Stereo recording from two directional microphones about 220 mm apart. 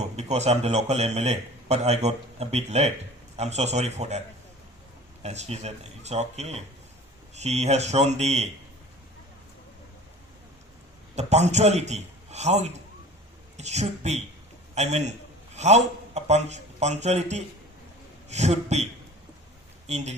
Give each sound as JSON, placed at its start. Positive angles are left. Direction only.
{"t": 0.0, "sound": "a man's voice", "side_deg": -30}
{"t": 5.2, "sound": "speech", "side_deg": -30}
{"t": 11.1, "sound": "a man's voice", "side_deg": -30}